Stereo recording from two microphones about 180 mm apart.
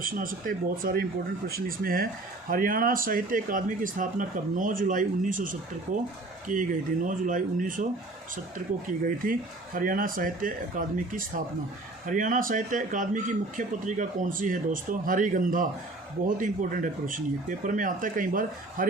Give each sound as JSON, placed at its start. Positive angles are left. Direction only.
{"t": 0.0, "sound": "speech", "side_deg": -50}
{"t": 9.0, "sound": "speech", "side_deg": -50}